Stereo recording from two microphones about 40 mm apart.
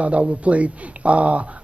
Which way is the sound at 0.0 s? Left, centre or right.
Right.